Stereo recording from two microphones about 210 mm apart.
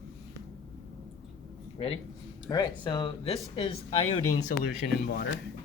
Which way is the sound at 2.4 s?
20° left (ahead or behind).